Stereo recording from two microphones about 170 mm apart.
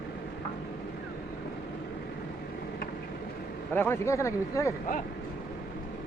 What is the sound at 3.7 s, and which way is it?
Speech, 15° left (ahead or behind).